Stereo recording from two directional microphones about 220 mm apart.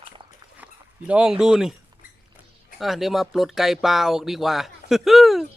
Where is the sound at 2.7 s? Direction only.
Centre (ahead or behind).